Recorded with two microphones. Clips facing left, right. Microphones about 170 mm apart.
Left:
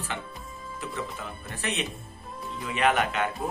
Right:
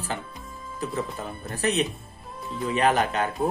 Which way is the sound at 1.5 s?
35° right (ahead or behind).